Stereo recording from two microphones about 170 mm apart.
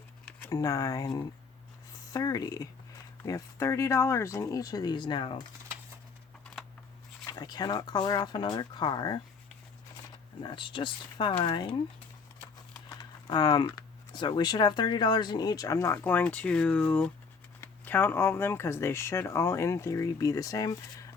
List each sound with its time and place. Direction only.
0.5 s speech: 20° left (ahead or behind)
7.3 s speech: 25° left (ahead or behind)
10.4 s speech: 30° left (ahead or behind)
13.0 s speech: 25° left (ahead or behind)